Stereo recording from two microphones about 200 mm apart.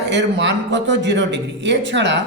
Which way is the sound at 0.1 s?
60° right (ahead or behind).